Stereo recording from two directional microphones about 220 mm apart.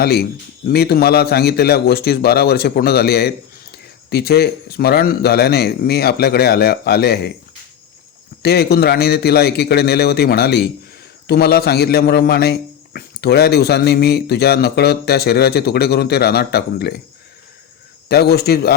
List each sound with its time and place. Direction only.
0.0 s a man's voice: 45° left (ahead or behind)
8.4 s a man's voice: 45° left (ahead or behind)
18.1 s a man's voice: 45° left (ahead or behind)